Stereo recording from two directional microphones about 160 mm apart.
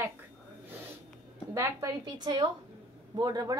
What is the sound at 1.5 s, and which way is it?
A woman's voice, 20° right (ahead or behind).